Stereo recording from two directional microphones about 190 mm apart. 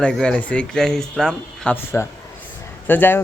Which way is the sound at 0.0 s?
5° left (ahead or behind).